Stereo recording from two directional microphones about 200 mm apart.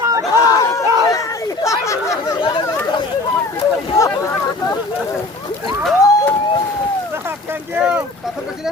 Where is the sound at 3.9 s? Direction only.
15° left (ahead or behind).